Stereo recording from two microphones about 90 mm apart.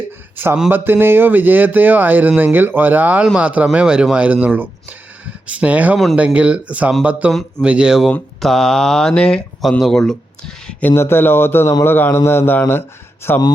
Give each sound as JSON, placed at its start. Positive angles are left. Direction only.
{"t": 0.7, "sound": "speech", "side_deg": -25}
{"t": 10.8, "sound": "a man's voice", "side_deg": 25}